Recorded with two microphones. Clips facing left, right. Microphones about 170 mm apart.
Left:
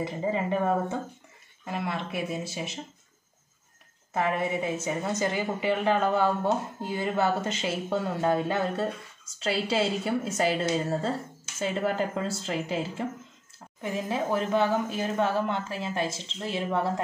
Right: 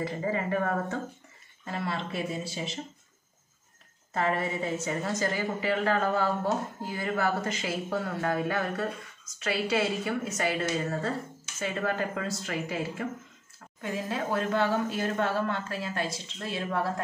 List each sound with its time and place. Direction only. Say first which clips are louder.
0.0 s a woman's voice: left 2 dB; 20° left (ahead or behind)
4.1 s a woman's voice: left 2 dB; 15° left (ahead or behind)